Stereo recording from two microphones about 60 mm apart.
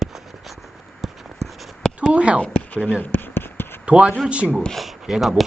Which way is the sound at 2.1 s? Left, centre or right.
Centre.